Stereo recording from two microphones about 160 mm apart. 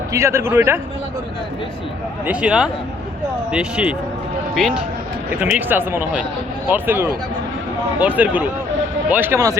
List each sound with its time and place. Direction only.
0.1 s speech: 15° right (ahead or behind)
2.2 s speech: 5° right (ahead or behind)
5.3 s speech: 10° right (ahead or behind)